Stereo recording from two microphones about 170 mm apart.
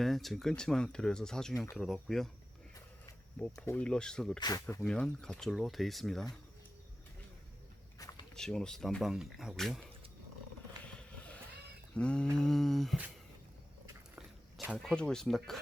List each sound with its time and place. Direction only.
0.0 s speech: centre (ahead or behind)
3.3 s speech: 5° left (ahead or behind)
4.4 s speech: 25° left (ahead or behind)
4.8 s speech: 5° left (ahead or behind)
7.9 s a sound: 20° left (ahead or behind)
8.4 s speech: 5° left (ahead or behind)
11.9 s speech: 5° left (ahead or behind)
14.2 s speech: 5° right (ahead or behind)